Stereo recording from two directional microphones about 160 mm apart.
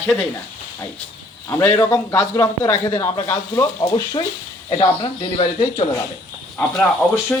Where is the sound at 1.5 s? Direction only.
15° left (ahead or behind); by 5.8 s 35° left (ahead or behind).